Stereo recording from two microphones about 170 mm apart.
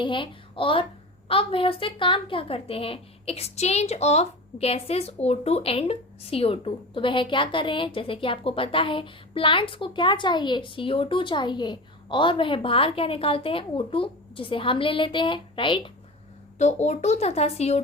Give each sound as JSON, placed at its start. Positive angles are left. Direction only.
{"t": 0.0, "sound": "a woman's voice", "side_deg": 30}
{"t": 16.6, "sound": "a woman's voice", "side_deg": 40}